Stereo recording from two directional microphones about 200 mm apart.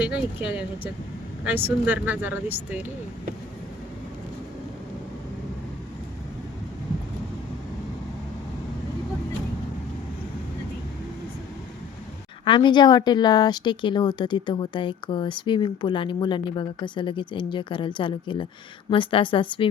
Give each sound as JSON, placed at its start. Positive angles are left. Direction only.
{"t": 0.0, "sound": "speech", "side_deg": -5}
{"t": 12.5, "sound": "speech", "side_deg": 25}